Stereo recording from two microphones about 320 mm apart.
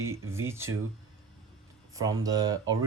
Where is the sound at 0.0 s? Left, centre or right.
Centre.